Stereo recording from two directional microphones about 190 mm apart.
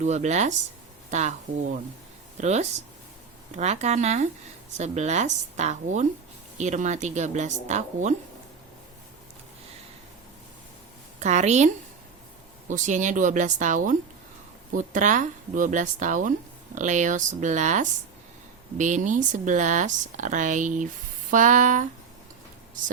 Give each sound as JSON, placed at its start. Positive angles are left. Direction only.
{"t": 0.0, "sound": "speech", "side_deg": -35}
{"t": 2.4, "sound": "speech", "side_deg": -35}
{"t": 11.2, "sound": "speech", "side_deg": -35}